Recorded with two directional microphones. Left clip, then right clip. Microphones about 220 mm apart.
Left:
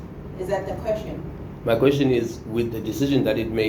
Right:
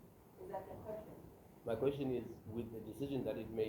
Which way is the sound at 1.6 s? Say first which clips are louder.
Left 19 dB; 15° right (ahead or behind).